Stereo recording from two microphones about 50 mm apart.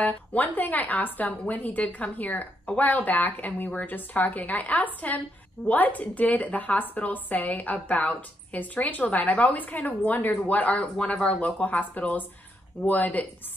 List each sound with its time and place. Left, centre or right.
0.0 s speech: left